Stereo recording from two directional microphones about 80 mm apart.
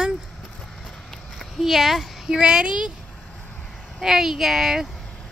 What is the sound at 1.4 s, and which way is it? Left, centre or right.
Speech, centre.